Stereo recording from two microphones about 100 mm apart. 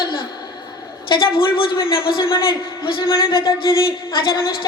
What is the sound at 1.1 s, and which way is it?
A woman's voice, 60° left (ahead or behind).